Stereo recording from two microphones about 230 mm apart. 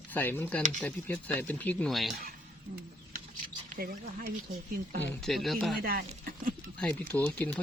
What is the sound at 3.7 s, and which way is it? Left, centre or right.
Speech, right.